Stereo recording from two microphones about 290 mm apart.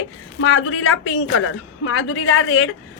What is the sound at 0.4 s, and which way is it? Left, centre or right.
A man's voice, left.